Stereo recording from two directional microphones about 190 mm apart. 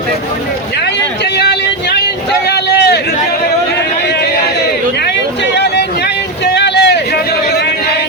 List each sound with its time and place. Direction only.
6.4 s vehicle: 65° left (ahead or behind)